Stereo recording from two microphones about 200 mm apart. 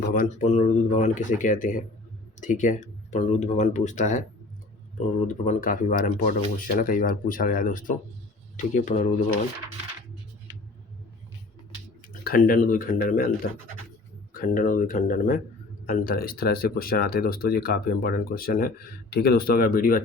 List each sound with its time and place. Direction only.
0.1 s speech: 40° left (ahead or behind)
5.3 s speech: 40° left (ahead or behind)
12.0 s speech: 45° left (ahead or behind)
14.3 s speech: 45° left (ahead or behind)